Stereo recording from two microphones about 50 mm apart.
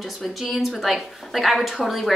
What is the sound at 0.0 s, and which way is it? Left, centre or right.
A woman's voice, centre.